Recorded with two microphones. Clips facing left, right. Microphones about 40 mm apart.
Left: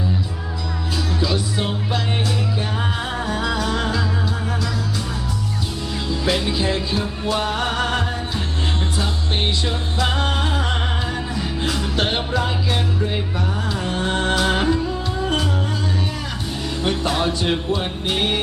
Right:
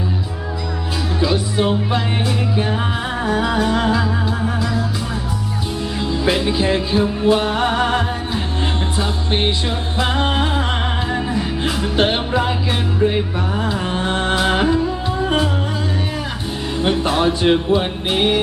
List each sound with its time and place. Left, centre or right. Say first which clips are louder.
1.2 s music: right 7 dB; centre
3.2 s music: right 7 dB; centre
6.0 s music: right 3 dB; centre
13.6 s music: right 4 dB; right
16.8 s music: right 4 dB; centre